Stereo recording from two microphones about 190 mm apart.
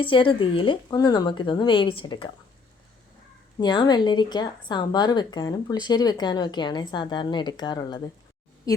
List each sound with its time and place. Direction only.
0.0 s speech: 25° left (ahead or behind)
3.6 s speech: 20° left (ahead or behind)